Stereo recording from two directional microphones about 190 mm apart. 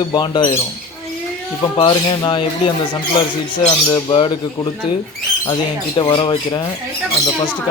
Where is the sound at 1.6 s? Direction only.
25° left (ahead or behind).